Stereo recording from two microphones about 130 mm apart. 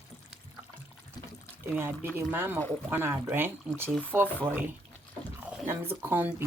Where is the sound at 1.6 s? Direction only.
15° right (ahead or behind).